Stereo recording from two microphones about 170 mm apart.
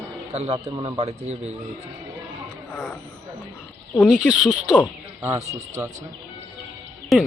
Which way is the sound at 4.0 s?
Centre (ahead or behind).